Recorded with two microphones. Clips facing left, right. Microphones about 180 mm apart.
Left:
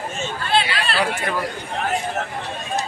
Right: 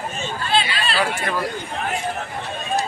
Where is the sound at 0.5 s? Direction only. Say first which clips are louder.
Left 1 dB; 60° left (ahead or behind).